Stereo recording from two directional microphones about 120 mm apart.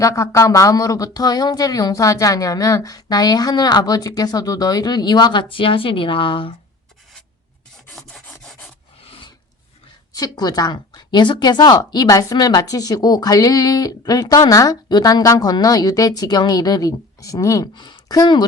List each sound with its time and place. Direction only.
0.0 s speech: 25° left (ahead or behind); by 6.5 s 45° left (ahead or behind)
7.9 s filing: 5° left (ahead or behind)
9.0 s filing: 50° left (ahead or behind)
10.2 s speech: 30° left (ahead or behind)